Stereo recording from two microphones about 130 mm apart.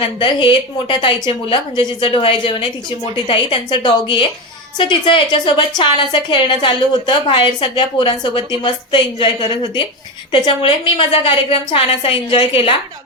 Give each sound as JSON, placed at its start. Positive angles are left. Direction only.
{"t": 0.0, "sound": "a woman's voice", "side_deg": 40}